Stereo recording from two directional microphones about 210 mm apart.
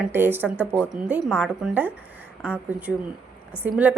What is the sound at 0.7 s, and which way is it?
A woman's voice, 5° left (ahead or behind).